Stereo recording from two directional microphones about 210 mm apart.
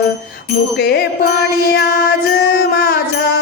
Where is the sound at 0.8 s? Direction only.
50° left (ahead or behind).